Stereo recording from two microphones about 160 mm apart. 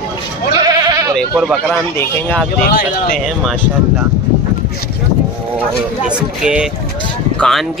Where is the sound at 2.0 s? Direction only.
10° left (ahead or behind).